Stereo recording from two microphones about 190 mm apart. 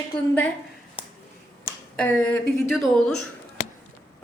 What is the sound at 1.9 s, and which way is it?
A woman's voice, 10° left (ahead or behind).